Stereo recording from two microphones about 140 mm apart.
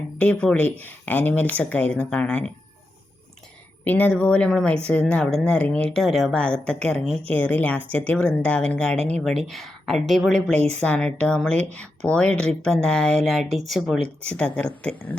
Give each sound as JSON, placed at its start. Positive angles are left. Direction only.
{"t": 0.2, "sound": "speech", "side_deg": 10}
{"t": 3.8, "sound": "speech", "side_deg": 10}